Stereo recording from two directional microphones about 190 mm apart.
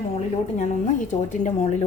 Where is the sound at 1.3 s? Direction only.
35° left (ahead or behind).